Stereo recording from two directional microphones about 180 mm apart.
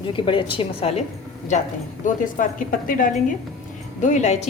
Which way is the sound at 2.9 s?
50° left (ahead or behind).